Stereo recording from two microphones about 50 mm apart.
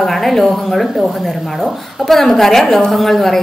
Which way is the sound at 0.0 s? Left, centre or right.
Centre.